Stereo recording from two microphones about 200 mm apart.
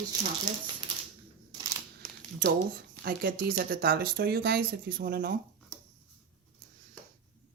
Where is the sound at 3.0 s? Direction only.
50° right (ahead or behind).